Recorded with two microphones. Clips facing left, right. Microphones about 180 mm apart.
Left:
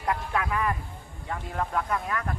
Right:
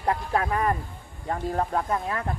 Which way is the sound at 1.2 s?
35° right (ahead or behind).